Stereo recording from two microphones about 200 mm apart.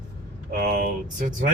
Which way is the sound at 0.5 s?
45° right (ahead or behind).